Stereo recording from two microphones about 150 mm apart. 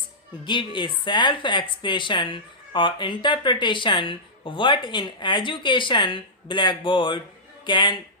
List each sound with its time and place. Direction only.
0.4 s a woman's voice: 30° left (ahead or behind)